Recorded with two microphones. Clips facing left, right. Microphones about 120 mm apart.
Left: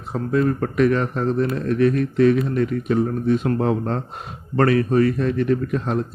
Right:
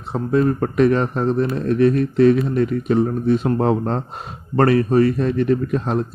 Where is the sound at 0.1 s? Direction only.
30° right (ahead or behind).